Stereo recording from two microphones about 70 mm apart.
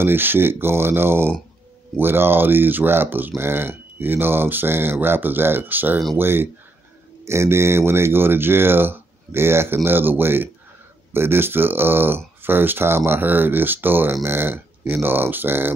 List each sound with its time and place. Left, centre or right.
0.0 s speech: right